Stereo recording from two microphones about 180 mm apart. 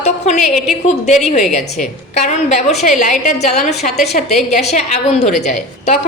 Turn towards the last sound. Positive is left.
turn(degrees=40)  # may be behind; listen again after turning